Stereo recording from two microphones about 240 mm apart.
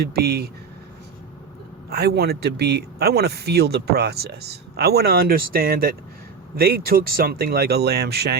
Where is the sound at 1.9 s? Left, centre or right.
Right.